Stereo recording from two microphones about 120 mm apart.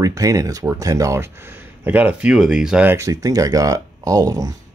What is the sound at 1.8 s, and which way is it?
Speech, 15° right (ahead or behind).